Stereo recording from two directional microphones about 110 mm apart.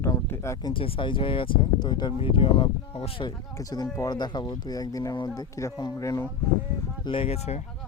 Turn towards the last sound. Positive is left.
turn(degrees=70)  # may be behind; listen again after turning